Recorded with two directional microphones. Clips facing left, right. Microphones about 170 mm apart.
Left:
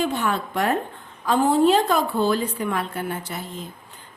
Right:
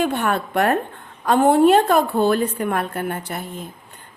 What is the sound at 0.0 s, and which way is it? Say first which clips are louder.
A woman's voice: right 3 dB; 60° right (ahead or behind).